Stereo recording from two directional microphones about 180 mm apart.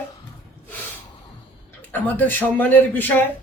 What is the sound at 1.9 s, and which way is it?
A man's voice, 10° left (ahead or behind).